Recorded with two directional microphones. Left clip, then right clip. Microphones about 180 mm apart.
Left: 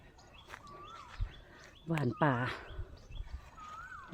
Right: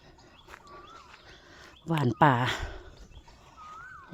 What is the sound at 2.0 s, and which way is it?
Speech, 45° right (ahead or behind).